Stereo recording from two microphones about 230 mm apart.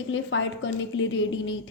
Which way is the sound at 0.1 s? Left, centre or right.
Left.